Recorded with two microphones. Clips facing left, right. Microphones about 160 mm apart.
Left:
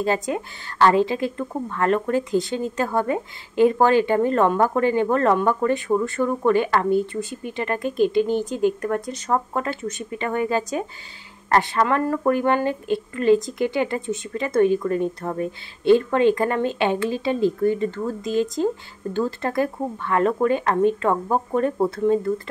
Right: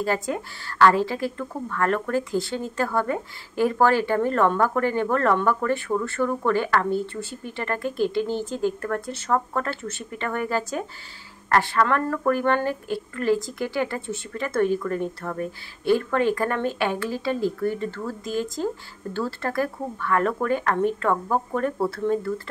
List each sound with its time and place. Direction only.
0.0 s a woman's voice: 20° left (ahead or behind)